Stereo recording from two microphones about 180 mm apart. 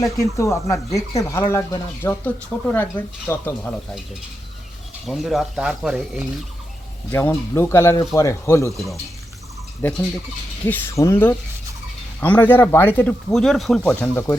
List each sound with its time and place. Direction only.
0.0 s speech: 15° left (ahead or behind)
5.0 s speech: centre (ahead or behind)
7.1 s speech: 15° left (ahead or behind)
9.8 s speech: 10° left (ahead or behind)